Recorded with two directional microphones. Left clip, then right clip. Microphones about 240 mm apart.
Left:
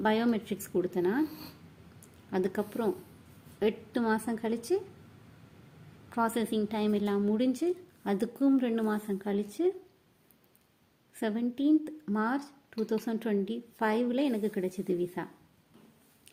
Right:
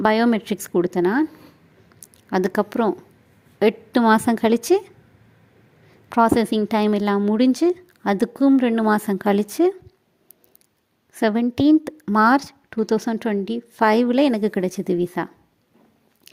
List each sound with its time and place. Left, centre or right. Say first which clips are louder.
0.0 s speech: right 11 dB; right
2.3 s speech: right 11 dB; right
6.1 s speech: right 13 dB; right
11.1 s speech: right 13 dB; right